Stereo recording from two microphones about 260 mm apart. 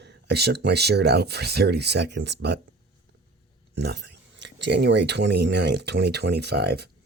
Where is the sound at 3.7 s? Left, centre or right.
Right.